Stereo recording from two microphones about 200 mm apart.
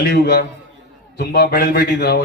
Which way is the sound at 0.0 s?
55° left (ahead or behind).